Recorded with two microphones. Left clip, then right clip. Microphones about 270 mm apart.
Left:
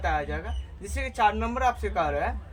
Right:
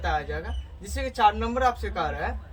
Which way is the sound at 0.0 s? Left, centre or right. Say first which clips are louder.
Even; left.